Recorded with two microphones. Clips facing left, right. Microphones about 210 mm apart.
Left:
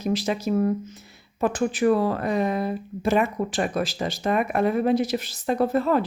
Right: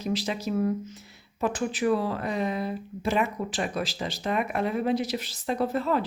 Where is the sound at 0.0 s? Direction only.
50° left (ahead or behind).